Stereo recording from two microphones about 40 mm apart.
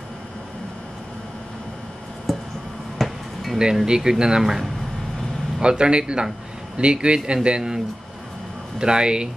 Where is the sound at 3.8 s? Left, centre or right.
Centre.